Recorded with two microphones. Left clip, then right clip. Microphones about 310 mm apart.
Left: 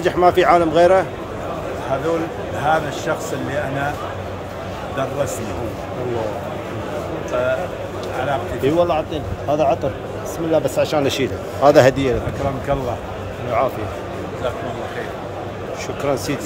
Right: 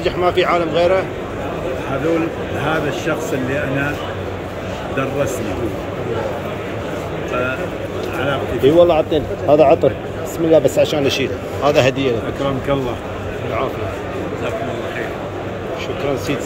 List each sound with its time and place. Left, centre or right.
0.0 s speech: left
2.6 s a man's voice: centre
8.3 s a man's voice: centre